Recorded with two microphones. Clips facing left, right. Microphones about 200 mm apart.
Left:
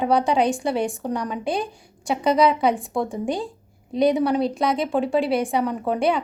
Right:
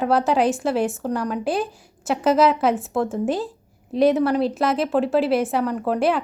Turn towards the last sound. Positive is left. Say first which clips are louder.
# right 1 dB
turn(degrees=0)  # may be behind; listen again after turning